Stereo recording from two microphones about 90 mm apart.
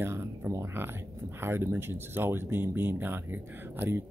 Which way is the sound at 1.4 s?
25° right (ahead or behind).